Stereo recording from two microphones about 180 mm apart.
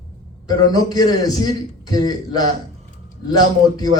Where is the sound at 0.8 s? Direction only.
20° left (ahead or behind).